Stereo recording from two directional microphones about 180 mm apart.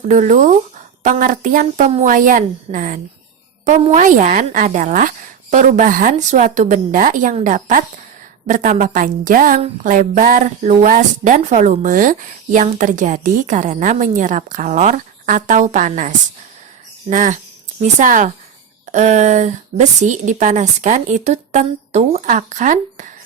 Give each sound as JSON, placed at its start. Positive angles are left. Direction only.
{"t": 0.1, "sound": "a woman's voice", "side_deg": -40}